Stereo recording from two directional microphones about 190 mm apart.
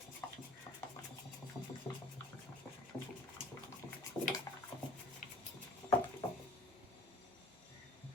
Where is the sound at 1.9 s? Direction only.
25° left (ahead or behind).